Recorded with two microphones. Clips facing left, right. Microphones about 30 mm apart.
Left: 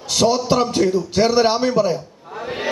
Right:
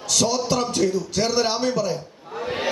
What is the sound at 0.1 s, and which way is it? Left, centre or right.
A man's voice, left.